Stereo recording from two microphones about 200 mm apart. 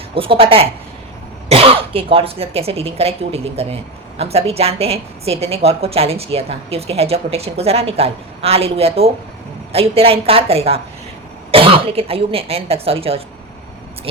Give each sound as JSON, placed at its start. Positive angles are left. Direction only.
{"t": 0.1, "sound": "a woman's voice", "side_deg": -25}